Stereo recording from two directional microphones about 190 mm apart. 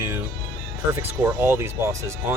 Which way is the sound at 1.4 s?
10° right (ahead or behind).